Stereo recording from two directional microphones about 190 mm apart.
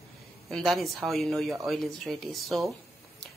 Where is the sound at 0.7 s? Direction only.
Centre (ahead or behind).